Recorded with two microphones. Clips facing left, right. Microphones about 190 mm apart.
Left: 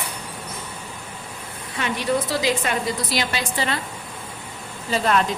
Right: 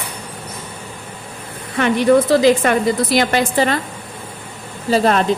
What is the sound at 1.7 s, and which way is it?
A woman's voice, 55° right (ahead or behind).